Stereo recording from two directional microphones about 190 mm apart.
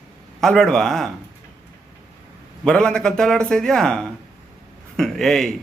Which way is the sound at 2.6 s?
5° left (ahead or behind).